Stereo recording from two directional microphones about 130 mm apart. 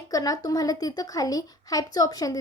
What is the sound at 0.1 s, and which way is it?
Speech, 30° left (ahead or behind).